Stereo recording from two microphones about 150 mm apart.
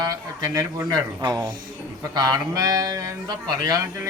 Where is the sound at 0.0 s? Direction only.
20° right (ahead or behind).